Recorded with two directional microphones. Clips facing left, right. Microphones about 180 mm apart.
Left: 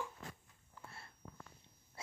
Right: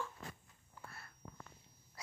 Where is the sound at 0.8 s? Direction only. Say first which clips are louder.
Right 1 dB; 10° right (ahead or behind).